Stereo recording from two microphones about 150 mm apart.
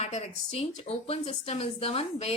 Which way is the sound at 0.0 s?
45° left (ahead or behind).